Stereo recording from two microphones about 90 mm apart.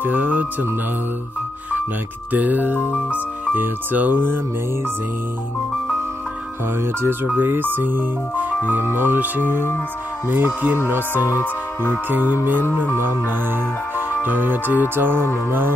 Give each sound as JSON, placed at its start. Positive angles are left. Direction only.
{"t": 0.0, "sound": "speech", "side_deg": -20}
{"t": 2.3, "sound": "speech", "side_deg": -20}
{"t": 7.3, "sound": "speech", "side_deg": -20}
{"t": 14.2, "sound": "speech", "side_deg": -20}